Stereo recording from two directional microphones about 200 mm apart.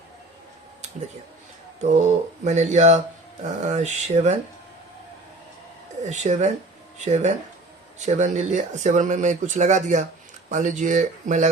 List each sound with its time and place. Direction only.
1.8 s speech: 35° right (ahead or behind)
6.0 s speech: 35° right (ahead or behind)